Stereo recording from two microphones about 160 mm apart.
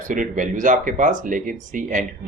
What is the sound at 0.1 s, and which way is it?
Speech, 55° right (ahead or behind).